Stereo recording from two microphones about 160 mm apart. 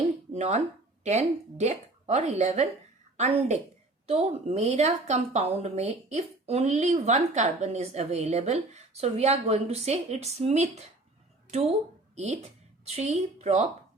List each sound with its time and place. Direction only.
0.3 s a woman's voice: 50° right (ahead or behind)